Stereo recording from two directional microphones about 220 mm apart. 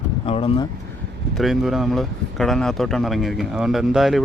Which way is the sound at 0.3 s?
25° left (ahead or behind).